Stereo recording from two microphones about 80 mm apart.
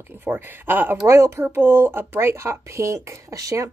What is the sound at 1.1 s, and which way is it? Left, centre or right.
Speech, right.